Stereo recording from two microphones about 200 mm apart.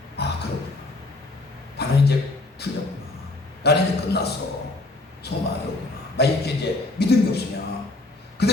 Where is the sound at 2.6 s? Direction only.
55° left (ahead or behind).